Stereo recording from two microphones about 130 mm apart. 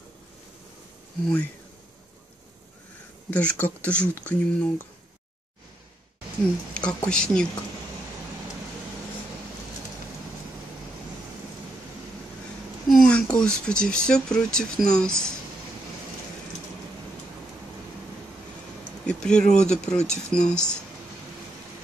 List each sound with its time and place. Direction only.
1.2 s speech: 10° left (ahead or behind)
3.3 s speech: 10° left (ahead or behind)
6.7 s speech: 5° left (ahead or behind)
12.8 s speech: 5° left (ahead or behind)
19.0 s speech: 5° left (ahead or behind)